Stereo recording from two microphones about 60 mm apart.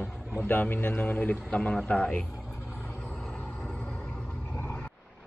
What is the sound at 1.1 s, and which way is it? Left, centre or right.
A man's voice, centre.